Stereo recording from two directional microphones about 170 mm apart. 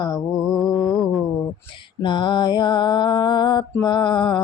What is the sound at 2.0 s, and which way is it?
Mantra, 25° left (ahead or behind).